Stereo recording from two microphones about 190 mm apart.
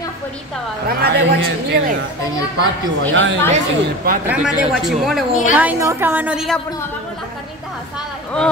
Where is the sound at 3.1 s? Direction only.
80° right.